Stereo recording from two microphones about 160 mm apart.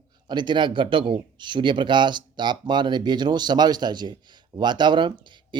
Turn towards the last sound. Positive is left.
turn(degrees=-30)  # may be behind; listen again after turning